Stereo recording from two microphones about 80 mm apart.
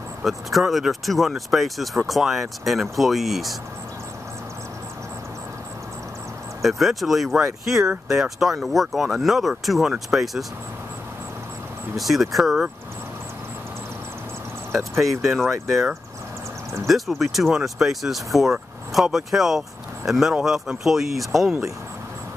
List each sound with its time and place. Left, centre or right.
0.2 s speech: centre
6.6 s speech: centre
12.0 s speech: centre
15.0 s speech: centre
16.8 s speech: centre